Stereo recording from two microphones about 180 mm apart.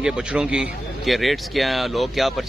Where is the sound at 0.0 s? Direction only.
5° right (ahead or behind).